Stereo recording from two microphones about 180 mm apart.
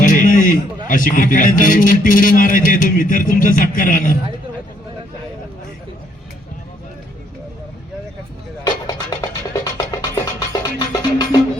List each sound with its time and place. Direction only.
0.0 s a sound: 50° left (ahead or behind)
0.9 s a man's voice: 50° left (ahead or behind)
8.6 s music: 20° left (ahead or behind)